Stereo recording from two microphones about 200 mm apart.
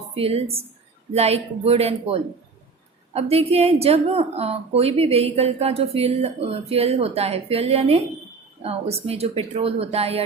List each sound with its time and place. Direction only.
0.2 s a woman's voice: 30° right (ahead or behind)